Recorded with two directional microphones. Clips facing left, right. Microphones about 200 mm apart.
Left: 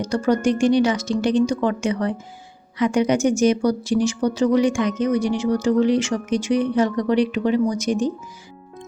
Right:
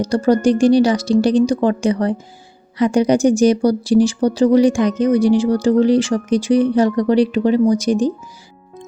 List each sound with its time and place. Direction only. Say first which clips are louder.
0.0 s speech: right 5 dB; 35° right (ahead or behind)